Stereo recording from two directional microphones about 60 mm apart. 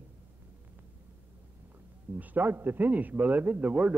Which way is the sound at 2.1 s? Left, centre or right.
Right.